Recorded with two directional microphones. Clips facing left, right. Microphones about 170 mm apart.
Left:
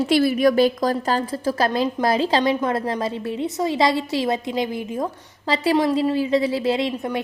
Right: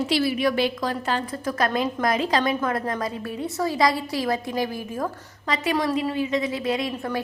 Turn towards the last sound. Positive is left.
turn(degrees=25)  # may be behind; listen again after turning